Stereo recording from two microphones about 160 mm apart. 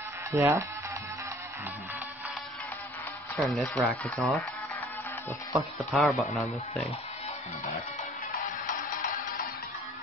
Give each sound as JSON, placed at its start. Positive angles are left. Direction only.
{"t": 0.3, "sound": "speech", "side_deg": -20}
{"t": 3.3, "sound": "speech", "side_deg": 5}
{"t": 5.9, "sound": "speech", "side_deg": 0}
{"t": 8.3, "sound": "music", "side_deg": 55}